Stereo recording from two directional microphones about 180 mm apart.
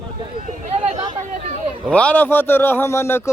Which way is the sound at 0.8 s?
35° right (ahead or behind).